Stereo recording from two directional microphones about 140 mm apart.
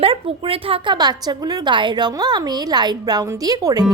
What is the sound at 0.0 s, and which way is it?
A woman's voice, 40° right (ahead or behind).